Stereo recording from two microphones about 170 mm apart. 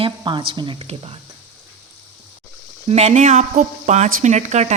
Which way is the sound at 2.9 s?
40° right (ahead or behind).